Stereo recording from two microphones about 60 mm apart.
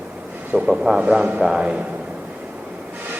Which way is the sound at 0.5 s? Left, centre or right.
Centre.